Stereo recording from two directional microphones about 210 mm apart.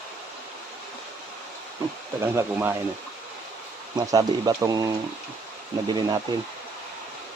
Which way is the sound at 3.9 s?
15° right (ahead or behind).